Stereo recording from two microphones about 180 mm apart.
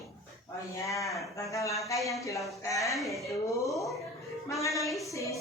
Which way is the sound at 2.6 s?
20° left (ahead or behind).